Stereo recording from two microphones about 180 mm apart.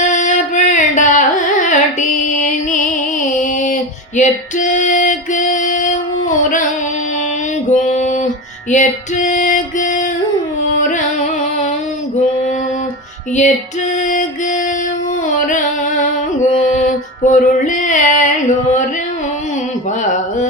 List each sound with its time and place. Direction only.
0.0 s music: 40° left (ahead or behind)
4.2 s music: 45° left (ahead or behind)
7.7 s a sound: 45° left (ahead or behind)
8.7 s music: 45° left (ahead or behind)
15.4 s music: 45° left (ahead or behind)
17.2 s female singing: 45° left (ahead or behind)